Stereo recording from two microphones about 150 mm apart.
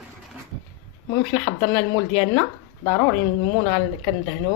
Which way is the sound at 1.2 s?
15° left (ahead or behind).